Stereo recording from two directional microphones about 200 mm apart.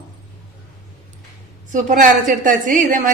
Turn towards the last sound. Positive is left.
turn(degrees=-40)  # may be behind; listen again after turning